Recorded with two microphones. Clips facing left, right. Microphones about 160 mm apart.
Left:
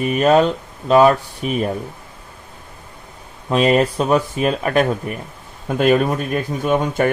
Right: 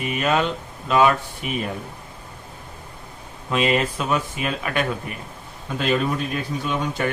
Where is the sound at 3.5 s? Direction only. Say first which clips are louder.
Left 6 dB; 40° left (ahead or behind).